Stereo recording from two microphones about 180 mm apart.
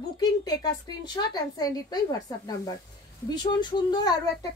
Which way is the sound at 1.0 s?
20° left (ahead or behind).